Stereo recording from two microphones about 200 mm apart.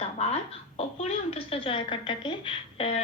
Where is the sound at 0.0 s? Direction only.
30° left (ahead or behind).